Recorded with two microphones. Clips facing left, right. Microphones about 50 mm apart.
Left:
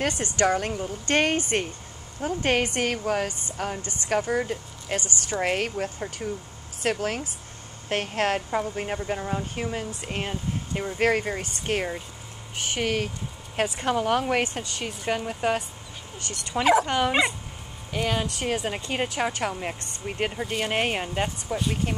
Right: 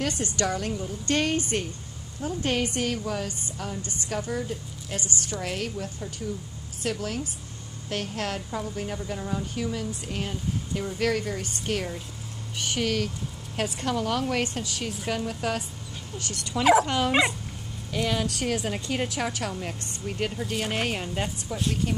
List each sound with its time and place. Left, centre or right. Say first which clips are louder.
0.0 s a woman's voice: left 4 dB; left
14.4 s speech: left 1 dB; centre